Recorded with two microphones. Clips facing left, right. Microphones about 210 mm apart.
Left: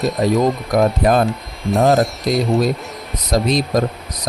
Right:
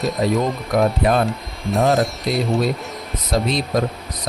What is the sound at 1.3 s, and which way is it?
Music, centre (ahead or behind).